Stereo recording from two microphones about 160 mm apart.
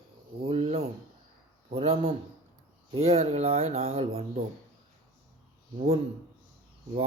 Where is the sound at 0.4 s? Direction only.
40° right (ahead or behind).